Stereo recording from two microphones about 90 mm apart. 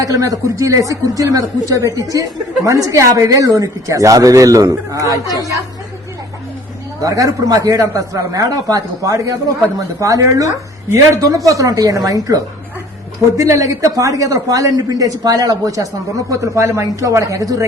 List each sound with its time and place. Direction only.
0.0 s speech: 40° right (ahead or behind)
5.2 s speech: 40° left (ahead or behind)
7.0 s speech: 40° right (ahead or behind)